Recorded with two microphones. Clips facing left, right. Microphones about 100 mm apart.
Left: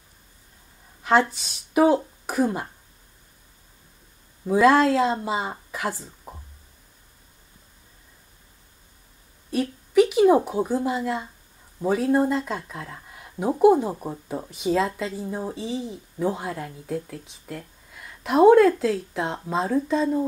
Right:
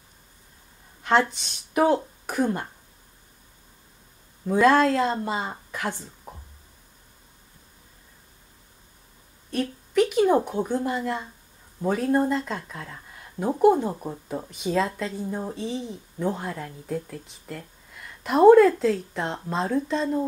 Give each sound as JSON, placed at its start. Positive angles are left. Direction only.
{"t": 1.0, "sound": "speech", "side_deg": 5}
{"t": 4.5, "sound": "speech", "side_deg": 5}
{"t": 9.5, "sound": "speech", "side_deg": 5}